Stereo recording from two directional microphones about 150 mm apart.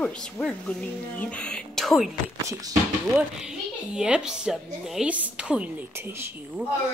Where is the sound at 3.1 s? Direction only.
5° right (ahead or behind).